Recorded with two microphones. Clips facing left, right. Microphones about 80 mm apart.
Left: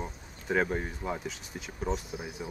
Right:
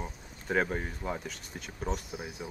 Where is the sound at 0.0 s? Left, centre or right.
Centre.